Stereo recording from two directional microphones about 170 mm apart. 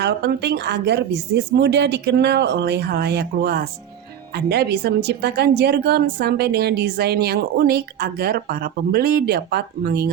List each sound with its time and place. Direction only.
0.0 s a woman's voice: 75° right (ahead or behind)